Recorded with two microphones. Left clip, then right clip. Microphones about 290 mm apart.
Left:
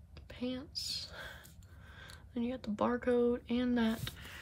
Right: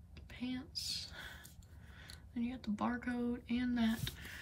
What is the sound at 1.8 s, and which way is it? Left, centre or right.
Speech, centre.